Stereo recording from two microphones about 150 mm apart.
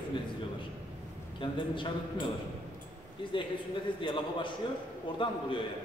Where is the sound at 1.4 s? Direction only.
35° left (ahead or behind).